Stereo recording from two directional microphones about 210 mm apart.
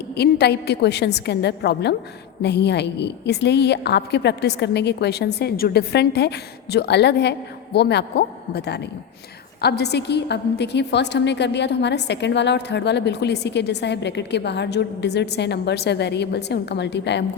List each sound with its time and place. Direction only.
0.2 s a woman's voice: 50° left (ahead or behind)